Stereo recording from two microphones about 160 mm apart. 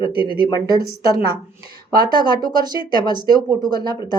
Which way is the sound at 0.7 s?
70° right (ahead or behind).